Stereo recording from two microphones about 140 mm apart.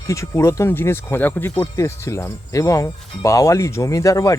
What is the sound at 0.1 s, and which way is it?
Speech, 20° left (ahead or behind).